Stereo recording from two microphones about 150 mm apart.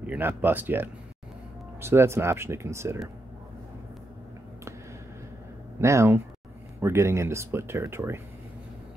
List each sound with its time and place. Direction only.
0.0 s speech: 10° right (ahead or behind)
5.8 s speech: 20° right (ahead or behind)